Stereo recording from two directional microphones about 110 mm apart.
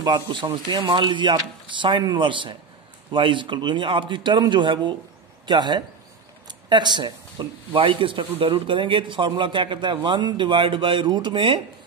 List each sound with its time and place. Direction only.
0.0 s speech: 45° right (ahead or behind)